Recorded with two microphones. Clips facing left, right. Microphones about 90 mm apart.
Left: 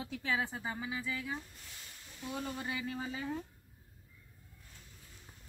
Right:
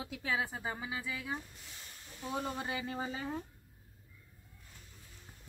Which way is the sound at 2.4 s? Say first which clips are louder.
Right 2 dB; 30° right (ahead or behind).